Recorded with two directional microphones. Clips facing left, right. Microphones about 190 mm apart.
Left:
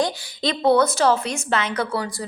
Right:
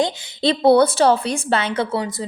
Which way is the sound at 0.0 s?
30° right (ahead or behind).